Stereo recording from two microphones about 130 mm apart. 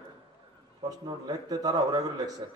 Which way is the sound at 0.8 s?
30° right (ahead or behind).